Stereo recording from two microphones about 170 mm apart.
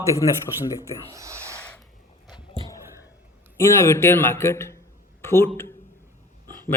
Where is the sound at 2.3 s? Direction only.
25° left (ahead or behind).